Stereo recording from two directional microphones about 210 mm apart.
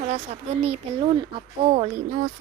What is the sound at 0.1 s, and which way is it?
Speech, 30° right (ahead or behind).